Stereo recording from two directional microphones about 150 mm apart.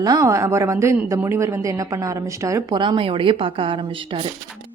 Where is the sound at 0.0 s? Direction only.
25° right (ahead or behind).